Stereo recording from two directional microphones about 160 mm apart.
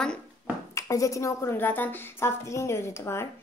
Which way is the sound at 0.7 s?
20° left (ahead or behind).